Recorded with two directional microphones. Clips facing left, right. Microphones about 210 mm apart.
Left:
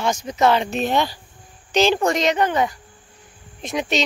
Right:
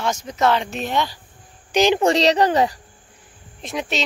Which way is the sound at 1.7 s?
15° right (ahead or behind).